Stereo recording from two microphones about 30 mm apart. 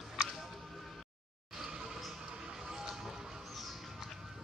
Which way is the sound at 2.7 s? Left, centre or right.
Centre.